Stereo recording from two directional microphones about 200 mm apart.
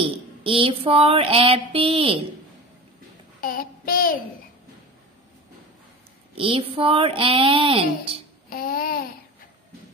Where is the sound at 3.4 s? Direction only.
45° left (ahead or behind).